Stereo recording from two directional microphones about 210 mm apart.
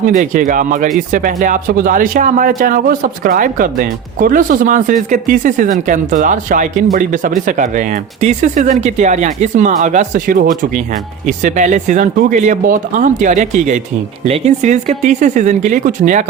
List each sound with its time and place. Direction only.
0.0 s speech: 40° right (ahead or behind)